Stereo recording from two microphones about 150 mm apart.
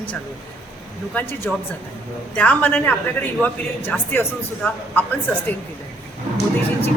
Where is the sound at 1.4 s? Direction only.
10° left (ahead or behind).